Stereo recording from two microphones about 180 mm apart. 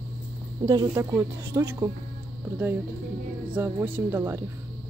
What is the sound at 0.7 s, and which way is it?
Speech, 15° right (ahead or behind).